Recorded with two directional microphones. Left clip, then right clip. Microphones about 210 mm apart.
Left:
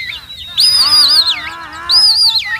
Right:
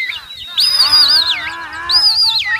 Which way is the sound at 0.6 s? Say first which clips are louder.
Left 2 dB; 55° left (ahead or behind).